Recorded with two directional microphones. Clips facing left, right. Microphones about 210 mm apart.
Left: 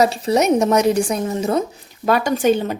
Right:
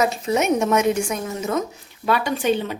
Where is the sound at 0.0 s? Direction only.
35° left (ahead or behind).